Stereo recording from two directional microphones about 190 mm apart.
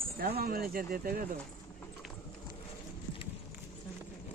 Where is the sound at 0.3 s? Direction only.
50° right (ahead or behind).